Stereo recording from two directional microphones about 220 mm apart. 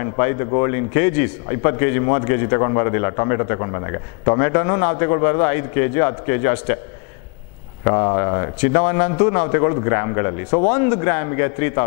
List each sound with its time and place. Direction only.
0.0 s a man's voice: 15° left (ahead or behind)
7.8 s a man's voice: 20° left (ahead or behind)